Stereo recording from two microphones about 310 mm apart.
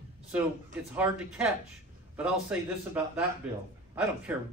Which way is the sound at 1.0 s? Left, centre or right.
Centre.